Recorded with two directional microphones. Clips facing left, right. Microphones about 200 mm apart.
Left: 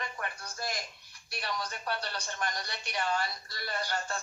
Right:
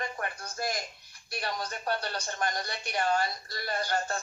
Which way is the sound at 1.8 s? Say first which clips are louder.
Right 6 dB; 45° right (ahead or behind).